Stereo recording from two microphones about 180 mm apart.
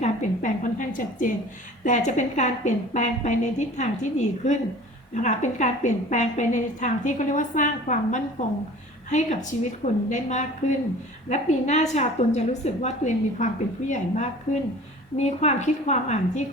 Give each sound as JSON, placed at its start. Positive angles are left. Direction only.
{"t": 0.0, "sound": "a woman's voice", "side_deg": 45}